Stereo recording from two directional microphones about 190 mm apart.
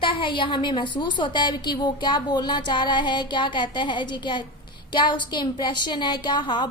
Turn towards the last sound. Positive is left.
turn(degrees=25)  # may be behind; listen again after turning